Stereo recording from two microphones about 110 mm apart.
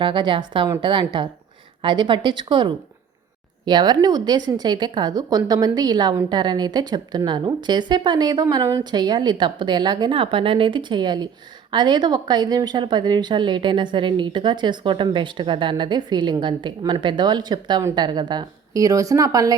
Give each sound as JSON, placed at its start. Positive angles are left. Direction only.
{"t": 0.0, "sound": "a woman's voice", "side_deg": -45}